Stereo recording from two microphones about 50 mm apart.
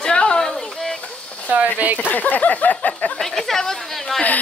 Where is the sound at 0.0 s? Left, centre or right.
Centre.